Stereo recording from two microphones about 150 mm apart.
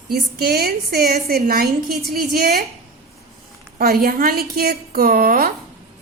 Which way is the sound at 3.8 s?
85° right.